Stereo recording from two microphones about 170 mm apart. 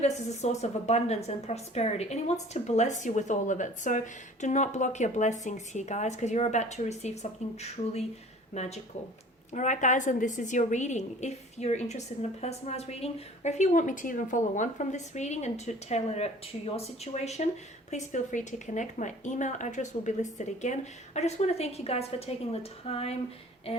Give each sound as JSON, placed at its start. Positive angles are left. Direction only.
{"t": 0.0, "sound": "a woman's voice", "side_deg": 40}